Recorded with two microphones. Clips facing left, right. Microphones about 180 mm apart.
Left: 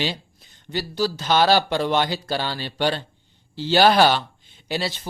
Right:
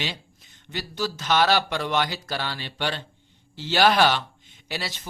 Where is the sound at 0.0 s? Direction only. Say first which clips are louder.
Left 6 dB; 35° left (ahead or behind).